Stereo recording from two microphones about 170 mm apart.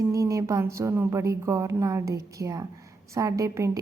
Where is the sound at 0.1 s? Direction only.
20° right (ahead or behind).